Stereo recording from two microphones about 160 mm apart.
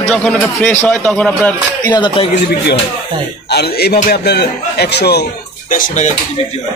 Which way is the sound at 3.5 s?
90° left.